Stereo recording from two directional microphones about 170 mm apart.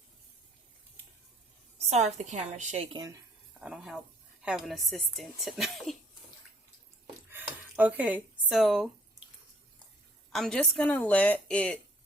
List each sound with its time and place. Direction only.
1.9 s a woman's voice: 45° right (ahead or behind)
2.9 s speech: 20° right (ahead or behind)
3.6 s a woman's voice: 5° right (ahead or behind)
7.3 s a sound: 10° right (ahead or behind)
10.3 s a woman's voice: 5° left (ahead or behind)